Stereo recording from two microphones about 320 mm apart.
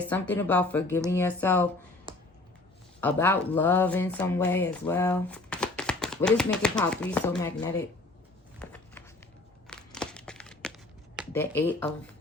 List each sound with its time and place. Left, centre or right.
0.0 s speech: centre
2.1 s finger snapping: centre
3.0 s speech: centre
8.5 s a sound: centre
9.6 s crumpling: centre
11.3 s speech: centre